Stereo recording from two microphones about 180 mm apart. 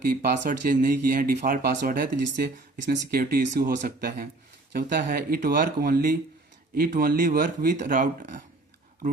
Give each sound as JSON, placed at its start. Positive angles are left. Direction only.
{"t": 0.0, "sound": "speech", "side_deg": -55}